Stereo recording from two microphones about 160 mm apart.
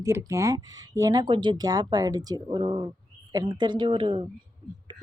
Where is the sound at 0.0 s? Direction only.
20° right (ahead or behind).